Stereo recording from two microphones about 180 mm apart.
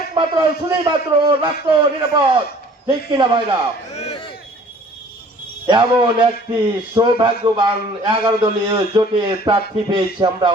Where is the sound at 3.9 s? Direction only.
35° left (ahead or behind).